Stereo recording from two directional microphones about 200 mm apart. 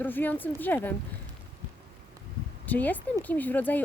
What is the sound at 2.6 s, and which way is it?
Speech, 10° left (ahead or behind).